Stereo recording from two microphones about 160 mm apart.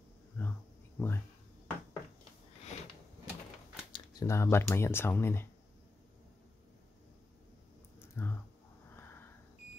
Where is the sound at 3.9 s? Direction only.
25° left (ahead or behind).